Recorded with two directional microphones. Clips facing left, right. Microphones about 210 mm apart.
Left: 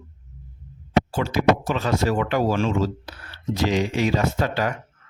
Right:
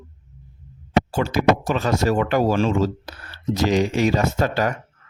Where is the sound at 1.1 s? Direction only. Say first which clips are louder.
Right 2 dB; 45° right (ahead or behind).